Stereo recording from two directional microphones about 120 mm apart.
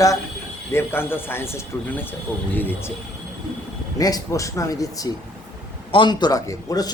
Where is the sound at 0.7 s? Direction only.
20° left (ahead or behind).